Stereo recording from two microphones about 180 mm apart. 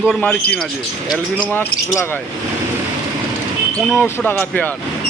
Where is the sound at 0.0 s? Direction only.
Centre (ahead or behind).